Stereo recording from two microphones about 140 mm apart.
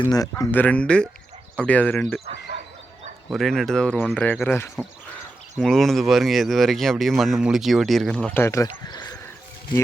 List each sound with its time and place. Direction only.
0.1 s speech: 25° left (ahead or behind)
0.5 s speech: 10° left (ahead or behind)
3.2 s speech: centre (ahead or behind); by 4.7 s 15° left (ahead or behind)
5.6 s speech: centre (ahead or behind)
8.4 s speech: 20° left (ahead or behind)
8.6 s speech: 30° left (ahead or behind)